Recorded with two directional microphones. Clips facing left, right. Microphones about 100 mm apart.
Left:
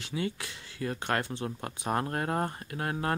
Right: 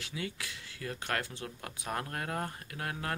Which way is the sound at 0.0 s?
30° left (ahead or behind).